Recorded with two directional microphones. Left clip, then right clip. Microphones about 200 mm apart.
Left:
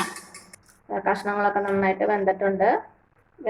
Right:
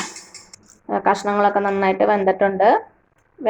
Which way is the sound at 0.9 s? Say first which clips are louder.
Right 6 dB; 40° right (ahead or behind).